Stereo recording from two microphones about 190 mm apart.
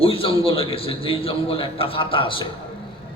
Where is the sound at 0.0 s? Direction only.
30° left (ahead or behind).